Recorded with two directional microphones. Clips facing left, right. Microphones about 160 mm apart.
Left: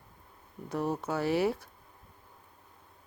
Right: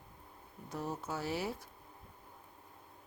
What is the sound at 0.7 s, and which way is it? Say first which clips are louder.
Speech: left 8 dB; 65° left (ahead or behind).